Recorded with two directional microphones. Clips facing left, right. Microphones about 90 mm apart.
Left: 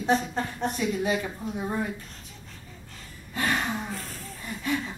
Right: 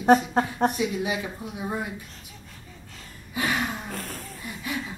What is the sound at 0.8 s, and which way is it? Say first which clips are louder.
Speech: even; 10° right (ahead or behind).